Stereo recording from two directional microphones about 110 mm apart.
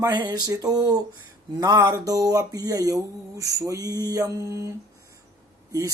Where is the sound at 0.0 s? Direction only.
40° right (ahead or behind).